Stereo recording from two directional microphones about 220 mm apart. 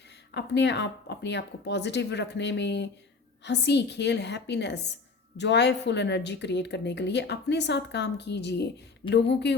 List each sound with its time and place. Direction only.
0.3 s speech: 50° left (ahead or behind)